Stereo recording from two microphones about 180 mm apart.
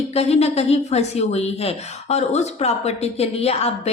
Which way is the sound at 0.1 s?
35° left (ahead or behind).